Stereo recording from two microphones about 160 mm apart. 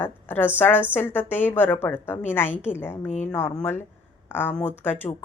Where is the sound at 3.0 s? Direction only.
45° left (ahead or behind).